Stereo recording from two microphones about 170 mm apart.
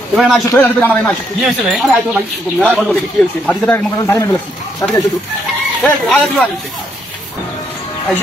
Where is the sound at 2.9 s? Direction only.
5° left (ahead or behind).